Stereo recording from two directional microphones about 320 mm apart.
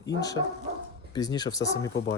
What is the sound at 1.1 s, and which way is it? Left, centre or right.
Speech, centre.